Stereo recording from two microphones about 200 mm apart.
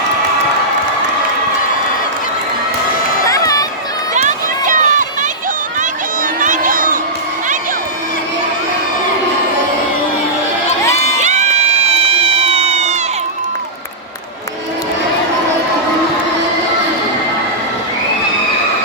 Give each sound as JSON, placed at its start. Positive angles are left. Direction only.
{"t": 3.2, "sound": "a sound", "side_deg": 15}
{"t": 4.1, "sound": "run", "side_deg": -40}
{"t": 6.4, "sound": "crowd", "side_deg": -40}
{"t": 11.2, "sound": "crowd", "side_deg": -35}
{"t": 11.9, "sound": "cat", "side_deg": -30}